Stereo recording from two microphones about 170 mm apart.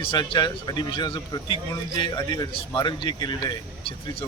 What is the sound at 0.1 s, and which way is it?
A man's voice, 25° left (ahead or behind).